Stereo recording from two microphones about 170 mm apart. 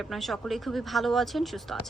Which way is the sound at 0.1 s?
Centre (ahead or behind).